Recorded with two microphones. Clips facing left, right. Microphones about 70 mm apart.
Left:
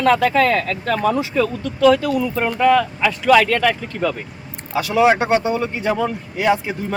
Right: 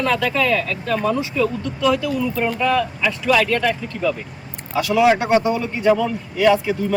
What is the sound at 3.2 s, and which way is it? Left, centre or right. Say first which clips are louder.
Speech: left 4 dB; left.